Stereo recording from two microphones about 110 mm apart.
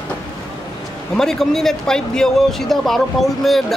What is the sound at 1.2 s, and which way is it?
Speech, 5° left (ahead or behind).